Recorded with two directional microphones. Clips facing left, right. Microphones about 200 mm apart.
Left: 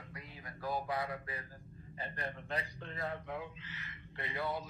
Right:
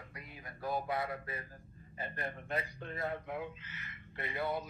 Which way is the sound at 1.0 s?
Centre (ahead or behind).